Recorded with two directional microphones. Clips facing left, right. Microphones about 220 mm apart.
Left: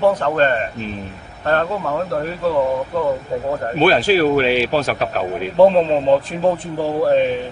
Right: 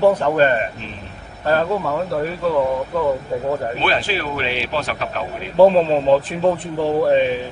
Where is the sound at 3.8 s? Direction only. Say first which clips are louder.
Left 8 dB; 45° left (ahead or behind).